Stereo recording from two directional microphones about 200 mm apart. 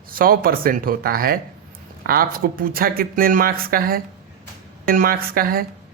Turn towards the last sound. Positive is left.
turn(degrees=-45)  # may be behind; listen again after turning